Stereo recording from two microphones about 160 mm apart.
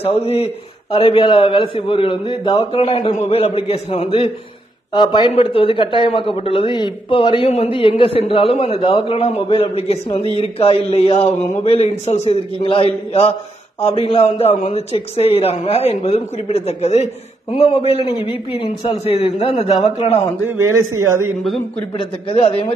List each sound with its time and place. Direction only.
0.0 s a man's voice: 40° left (ahead or behind)
20.4 s speech: 20° right (ahead or behind)
21.9 s a man's voice: 35° left (ahead or behind)